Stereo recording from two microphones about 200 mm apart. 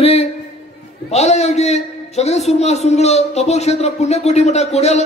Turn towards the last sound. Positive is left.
turn(degrees=35)  # may be behind; listen again after turning